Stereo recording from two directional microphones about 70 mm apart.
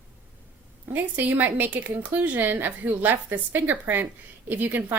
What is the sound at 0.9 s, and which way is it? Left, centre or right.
Speech, right.